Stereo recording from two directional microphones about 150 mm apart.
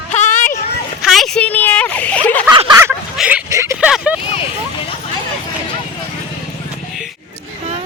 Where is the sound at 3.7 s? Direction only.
5° right (ahead or behind).